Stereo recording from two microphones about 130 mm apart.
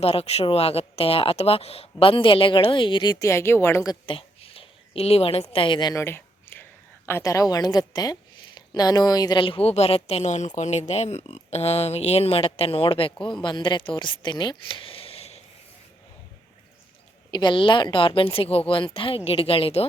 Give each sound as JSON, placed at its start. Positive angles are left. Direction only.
{"t": 0.0, "sound": "speech", "side_deg": 50}
{"t": 3.2, "sound": "a woman's voice", "side_deg": 20}
{"t": 4.0, "sound": "a woman's voice", "side_deg": 45}
{"t": 6.0, "sound": "a woman's voice", "side_deg": 20}
{"t": 9.4, "sound": "speech", "side_deg": 45}
{"t": 17.3, "sound": "speech", "side_deg": 40}